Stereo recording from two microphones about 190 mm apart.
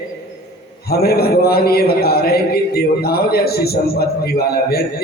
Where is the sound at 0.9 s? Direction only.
55° left (ahead or behind).